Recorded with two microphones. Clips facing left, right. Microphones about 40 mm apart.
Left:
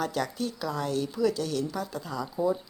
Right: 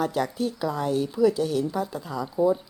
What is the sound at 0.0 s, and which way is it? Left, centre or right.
Speech, centre.